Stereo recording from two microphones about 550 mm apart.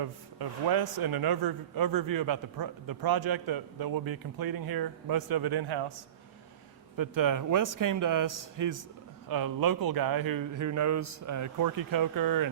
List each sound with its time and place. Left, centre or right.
0.0 s a man's voice: right
6.9 s a man's voice: right